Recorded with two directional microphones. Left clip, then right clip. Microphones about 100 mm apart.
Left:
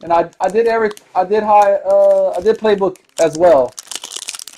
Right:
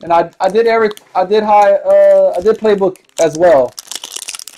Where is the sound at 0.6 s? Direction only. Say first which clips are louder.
Right 3 dB; 30° right (ahead or behind).